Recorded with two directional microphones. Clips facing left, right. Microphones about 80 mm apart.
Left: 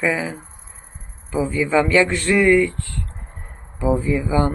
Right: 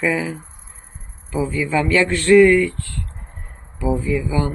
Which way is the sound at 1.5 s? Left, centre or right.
Left.